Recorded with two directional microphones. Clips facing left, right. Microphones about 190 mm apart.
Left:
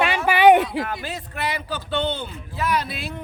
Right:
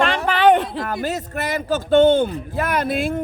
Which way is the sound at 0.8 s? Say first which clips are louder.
Right 6 dB; 45° right (ahead or behind).